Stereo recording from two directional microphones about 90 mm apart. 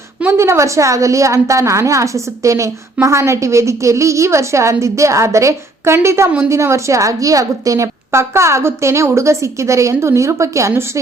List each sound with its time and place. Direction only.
0.3 s a woman's voice: 30° right (ahead or behind)